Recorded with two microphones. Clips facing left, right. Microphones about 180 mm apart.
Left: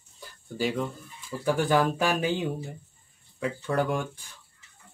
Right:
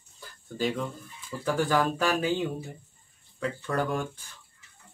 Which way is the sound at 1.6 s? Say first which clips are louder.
Left 2 dB; 15° left (ahead or behind).